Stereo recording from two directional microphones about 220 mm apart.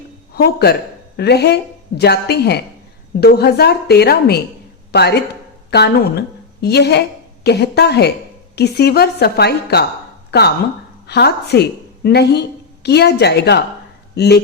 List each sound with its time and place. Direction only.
0.3 s a woman's voice: 45° left (ahead or behind)
11.0 s a woman's voice: 50° left (ahead or behind)